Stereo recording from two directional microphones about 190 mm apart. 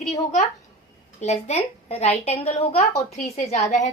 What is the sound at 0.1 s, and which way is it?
A woman's voice, 35° left (ahead or behind).